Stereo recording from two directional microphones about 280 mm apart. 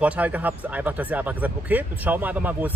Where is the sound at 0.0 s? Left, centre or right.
Centre.